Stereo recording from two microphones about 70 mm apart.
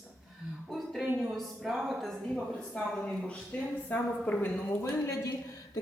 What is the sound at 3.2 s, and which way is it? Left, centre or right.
Speech, centre.